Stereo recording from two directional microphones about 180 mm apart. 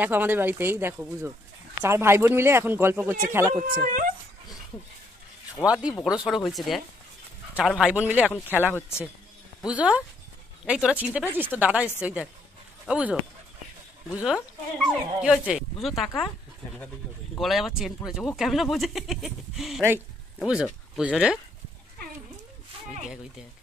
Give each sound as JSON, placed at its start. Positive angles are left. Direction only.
{"t": 0.0, "sound": "speech", "side_deg": -10}
{"t": 3.8, "sound": "speech", "side_deg": -50}
{"t": 5.7, "sound": "speech", "side_deg": -5}
{"t": 8.7, "sound": "a man's voice", "side_deg": 15}
{"t": 9.7, "sound": "speech", "side_deg": -5}
{"t": 17.4, "sound": "speech", "side_deg": 0}